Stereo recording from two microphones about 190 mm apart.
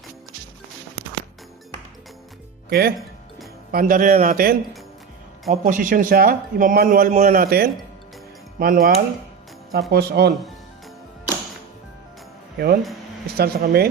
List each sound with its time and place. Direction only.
2.6 s speech: 55° right (ahead or behind)
9.9 s speech: 55° right (ahead or behind)
12.5 s speech: 55° right (ahead or behind)